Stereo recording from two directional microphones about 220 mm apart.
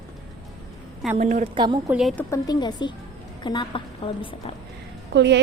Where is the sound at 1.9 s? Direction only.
Centre (ahead or behind).